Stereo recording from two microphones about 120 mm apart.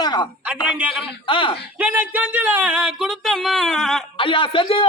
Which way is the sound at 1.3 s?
45° left (ahead or behind).